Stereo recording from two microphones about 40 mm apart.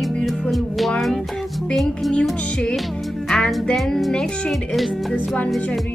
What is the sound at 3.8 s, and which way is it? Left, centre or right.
Music, centre.